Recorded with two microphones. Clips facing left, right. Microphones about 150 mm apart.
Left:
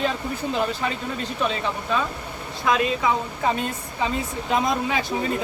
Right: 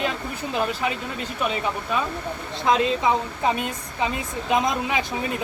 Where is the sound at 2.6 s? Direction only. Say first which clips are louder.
Right 1 dB; 25° right (ahead or behind).